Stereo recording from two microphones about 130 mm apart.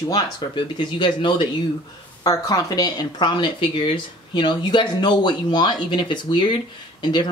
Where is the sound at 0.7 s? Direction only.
35° left (ahead or behind).